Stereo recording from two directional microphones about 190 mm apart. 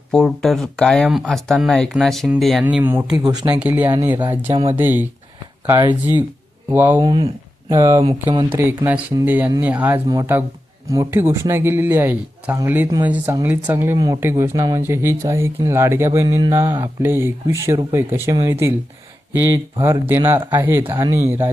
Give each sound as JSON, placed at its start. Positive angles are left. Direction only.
{"t": 0.1, "sound": "speech", "side_deg": 5}
{"t": 6.7, "sound": "speech", "side_deg": -10}
{"t": 7.0, "sound": "speech", "side_deg": -25}
{"t": 8.3, "sound": "speech", "side_deg": -25}
{"t": 8.5, "sound": "speech", "side_deg": -10}